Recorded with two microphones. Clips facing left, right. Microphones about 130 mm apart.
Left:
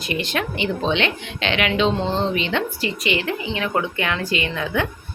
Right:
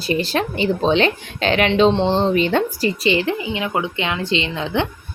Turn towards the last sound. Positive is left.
turn(degrees=-25)  # may be behind; listen again after turning